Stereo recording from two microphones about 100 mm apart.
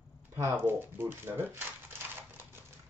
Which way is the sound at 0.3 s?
25° right (ahead or behind).